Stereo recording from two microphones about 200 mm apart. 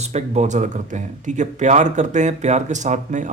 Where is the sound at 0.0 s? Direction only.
35° right (ahead or behind).